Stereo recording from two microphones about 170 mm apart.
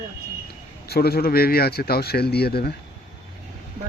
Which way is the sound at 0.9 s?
65° left (ahead or behind).